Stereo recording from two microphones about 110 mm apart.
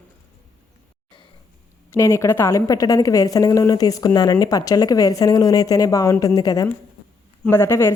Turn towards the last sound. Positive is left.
turn(degrees=20)  # may be behind; listen again after turning